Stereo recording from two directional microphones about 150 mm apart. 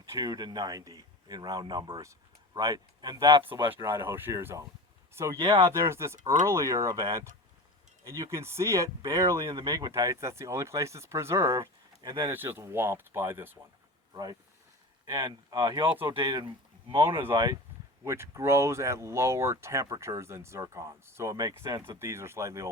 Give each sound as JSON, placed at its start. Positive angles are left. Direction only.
{"t": 0.0, "sound": "speech", "side_deg": -25}
{"t": 3.7, "sound": "speech", "side_deg": -15}
{"t": 5.4, "sound": "speech", "side_deg": -35}
{"t": 5.7, "sound": "speech", "side_deg": -20}
{"t": 12.3, "sound": "speech", "side_deg": -15}
{"t": 16.9, "sound": "speech", "side_deg": -15}
{"t": 17.3, "sound": "speech", "side_deg": -25}